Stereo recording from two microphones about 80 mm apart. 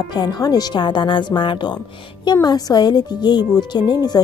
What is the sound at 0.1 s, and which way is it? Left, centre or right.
A woman's voice, left.